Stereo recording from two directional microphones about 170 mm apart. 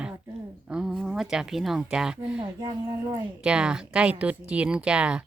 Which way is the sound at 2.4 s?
25° right (ahead or behind).